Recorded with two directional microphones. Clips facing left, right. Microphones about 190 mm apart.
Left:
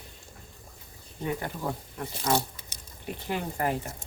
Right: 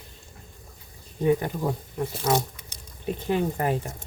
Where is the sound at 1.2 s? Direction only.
20° right (ahead or behind).